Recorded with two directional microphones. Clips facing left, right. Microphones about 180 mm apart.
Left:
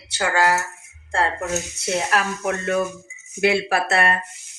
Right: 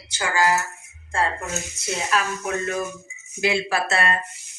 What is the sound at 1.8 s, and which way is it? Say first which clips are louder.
Speech: left 2 dB; 65° left (ahead or behind).